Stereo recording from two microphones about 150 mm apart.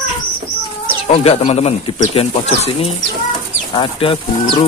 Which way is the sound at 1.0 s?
45° left (ahead or behind).